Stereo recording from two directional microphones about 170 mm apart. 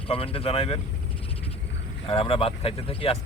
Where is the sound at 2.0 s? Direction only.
30° left (ahead or behind).